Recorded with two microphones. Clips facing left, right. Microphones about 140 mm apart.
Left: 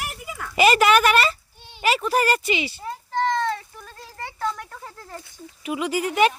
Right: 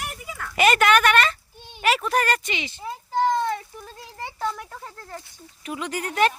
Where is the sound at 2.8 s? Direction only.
5° right (ahead or behind).